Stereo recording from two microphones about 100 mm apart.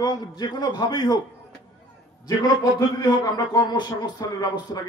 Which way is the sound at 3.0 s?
40° left (ahead or behind).